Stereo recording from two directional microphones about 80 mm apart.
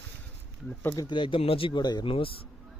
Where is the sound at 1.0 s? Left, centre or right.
Left.